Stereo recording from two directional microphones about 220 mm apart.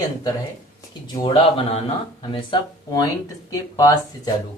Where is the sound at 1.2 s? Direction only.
25° left (ahead or behind).